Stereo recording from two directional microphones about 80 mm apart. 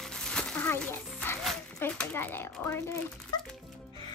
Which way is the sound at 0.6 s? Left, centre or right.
Left.